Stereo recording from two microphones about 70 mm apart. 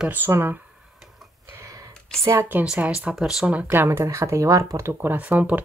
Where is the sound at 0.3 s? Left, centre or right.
Right.